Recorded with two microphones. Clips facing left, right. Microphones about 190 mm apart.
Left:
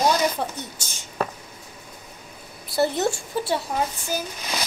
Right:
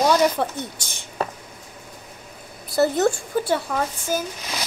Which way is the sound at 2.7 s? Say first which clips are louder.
Right 3 dB; 50° right (ahead or behind).